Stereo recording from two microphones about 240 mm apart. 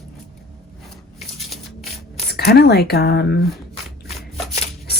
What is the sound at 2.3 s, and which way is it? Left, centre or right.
Speech, left.